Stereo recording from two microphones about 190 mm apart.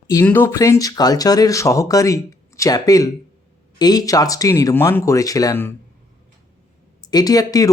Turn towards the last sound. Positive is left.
turn(degrees=20)  # may be behind; listen again after turning